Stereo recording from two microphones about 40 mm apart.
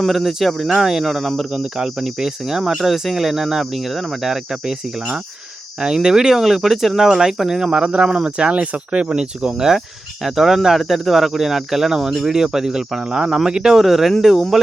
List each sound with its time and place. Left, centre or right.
0.0 s speech: centre
5.8 s speech: centre
7.9 s speech: right
13.8 s speech: centre